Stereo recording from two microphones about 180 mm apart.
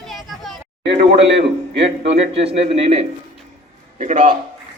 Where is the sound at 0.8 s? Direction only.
75° right (ahead or behind).